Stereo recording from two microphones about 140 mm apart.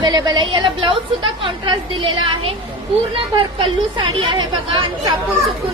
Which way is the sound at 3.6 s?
35° right (ahead or behind).